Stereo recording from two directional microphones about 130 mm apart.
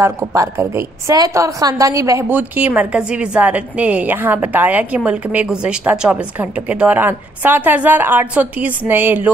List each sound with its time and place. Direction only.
0.0 s a woman's voice: 25° right (ahead or behind)
2.2 s a woman's voice: 15° right (ahead or behind)